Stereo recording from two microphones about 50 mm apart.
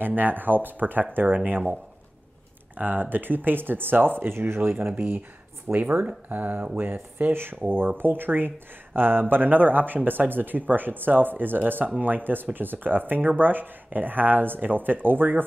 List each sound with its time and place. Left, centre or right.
0.0 s speech: right
2.8 s speech: right